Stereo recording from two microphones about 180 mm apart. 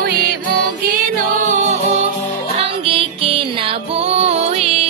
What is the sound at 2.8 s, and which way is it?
Music, 30° right (ahead or behind).